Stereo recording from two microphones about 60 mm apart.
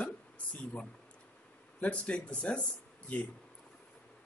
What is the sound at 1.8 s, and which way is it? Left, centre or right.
Speech, left.